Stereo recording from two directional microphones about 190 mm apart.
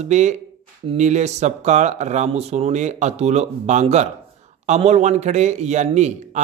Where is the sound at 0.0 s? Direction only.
40° right (ahead or behind).